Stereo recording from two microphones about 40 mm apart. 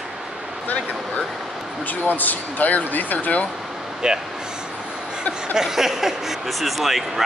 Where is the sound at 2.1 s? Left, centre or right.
Left.